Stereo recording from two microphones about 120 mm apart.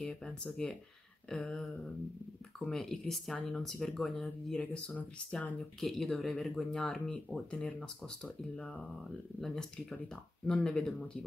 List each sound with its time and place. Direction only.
0.0 s speech: 5° left (ahead or behind)
5.8 s speech: 5° left (ahead or behind)